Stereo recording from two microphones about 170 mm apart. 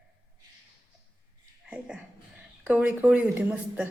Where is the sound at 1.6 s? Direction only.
5° right (ahead or behind).